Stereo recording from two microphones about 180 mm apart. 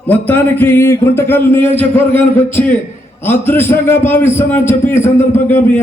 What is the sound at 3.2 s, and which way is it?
A man's voice, 10° left (ahead or behind).